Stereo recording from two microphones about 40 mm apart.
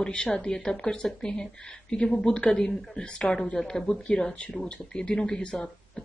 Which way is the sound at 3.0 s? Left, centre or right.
Left.